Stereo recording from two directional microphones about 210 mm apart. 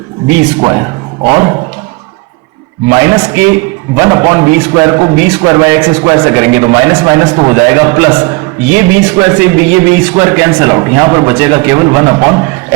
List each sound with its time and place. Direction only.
0.6 s speech: 20° right (ahead or behind)
2.9 s speech: 15° right (ahead or behind)